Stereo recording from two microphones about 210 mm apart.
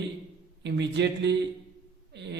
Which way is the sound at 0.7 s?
55° right (ahead or behind).